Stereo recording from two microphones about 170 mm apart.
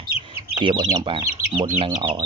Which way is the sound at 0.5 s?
25° right (ahead or behind).